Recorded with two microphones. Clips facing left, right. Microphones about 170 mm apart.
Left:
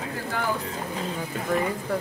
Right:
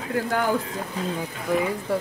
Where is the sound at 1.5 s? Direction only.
10° right (ahead or behind).